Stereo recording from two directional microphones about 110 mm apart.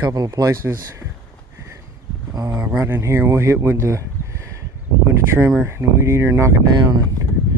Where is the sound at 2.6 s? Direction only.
20° right (ahead or behind).